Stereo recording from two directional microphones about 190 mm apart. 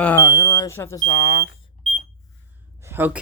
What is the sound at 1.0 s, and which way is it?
Speech, 50° left (ahead or behind).